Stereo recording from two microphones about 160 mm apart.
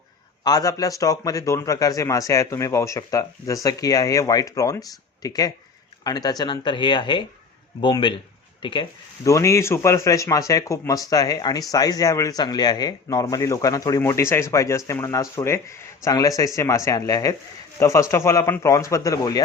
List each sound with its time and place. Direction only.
0.4 s a man's voice: 25° left (ahead or behind)
9.2 s a man's voice: 20° left (ahead or behind)